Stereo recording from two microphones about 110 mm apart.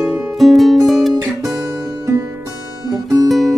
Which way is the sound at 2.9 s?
35° right (ahead or behind).